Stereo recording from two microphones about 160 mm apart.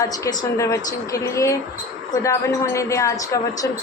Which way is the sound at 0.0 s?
20° left (ahead or behind).